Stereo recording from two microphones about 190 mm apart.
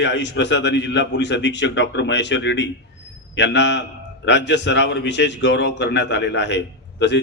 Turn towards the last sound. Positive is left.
turn(degrees=70)  # may be behind; listen again after turning